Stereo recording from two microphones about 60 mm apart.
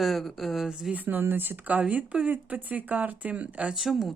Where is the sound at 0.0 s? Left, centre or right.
Centre.